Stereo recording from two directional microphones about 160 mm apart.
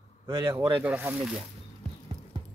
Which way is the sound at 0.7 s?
10° right (ahead or behind).